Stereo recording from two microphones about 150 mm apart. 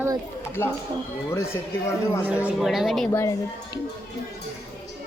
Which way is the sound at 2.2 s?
10° right (ahead or behind).